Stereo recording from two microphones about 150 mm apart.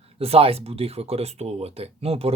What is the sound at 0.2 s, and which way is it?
Speech, 40° right (ahead or behind).